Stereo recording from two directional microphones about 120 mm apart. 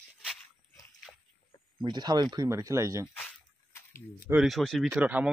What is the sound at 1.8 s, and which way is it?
Speech, 35° right (ahead or behind).